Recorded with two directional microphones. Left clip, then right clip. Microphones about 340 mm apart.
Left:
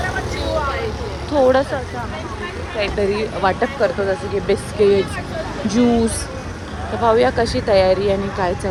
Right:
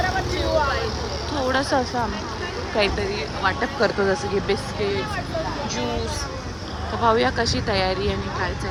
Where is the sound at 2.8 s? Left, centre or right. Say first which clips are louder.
Right 1 dB; centre.